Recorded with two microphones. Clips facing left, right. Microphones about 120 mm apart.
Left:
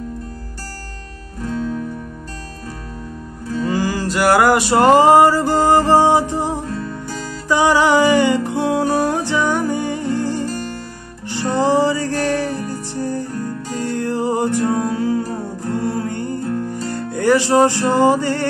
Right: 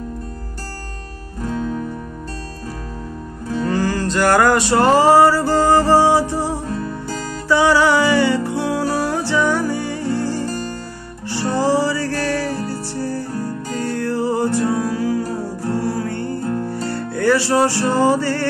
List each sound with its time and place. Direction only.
3.6 s music: 10° left (ahead or behind)
10.4 s music: 40° right (ahead or behind)
11.5 s music: 20° left (ahead or behind)